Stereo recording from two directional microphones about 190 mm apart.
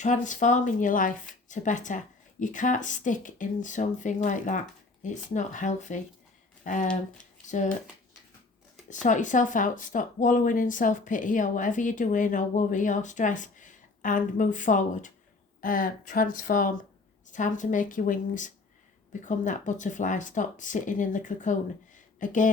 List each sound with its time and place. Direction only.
0.0 s speech: 40° left (ahead or behind)
8.9 s speech: 40° left (ahead or behind)